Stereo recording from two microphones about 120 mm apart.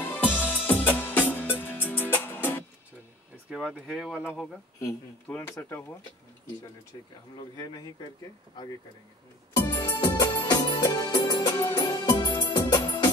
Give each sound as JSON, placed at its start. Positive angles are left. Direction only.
{"t": 0.0, "sound": "music", "side_deg": 15}
{"t": 3.4, "sound": "speech", "side_deg": -5}
{"t": 5.3, "sound": "speech", "side_deg": 20}
{"t": 9.6, "sound": "music", "side_deg": 25}
{"t": 9.9, "sound": "music", "side_deg": 35}